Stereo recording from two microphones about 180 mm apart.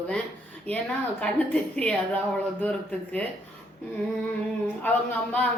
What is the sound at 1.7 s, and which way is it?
A woman's voice, 5° left (ahead or behind).